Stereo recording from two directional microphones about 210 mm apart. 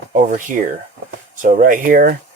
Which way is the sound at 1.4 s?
40° right (ahead or behind).